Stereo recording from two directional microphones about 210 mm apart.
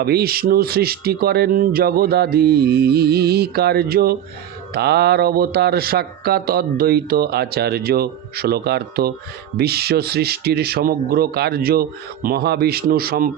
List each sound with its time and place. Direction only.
0.0 s mantra: 50° right (ahead or behind)